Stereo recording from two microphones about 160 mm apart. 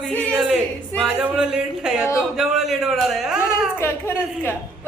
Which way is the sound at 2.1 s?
5° right (ahead or behind).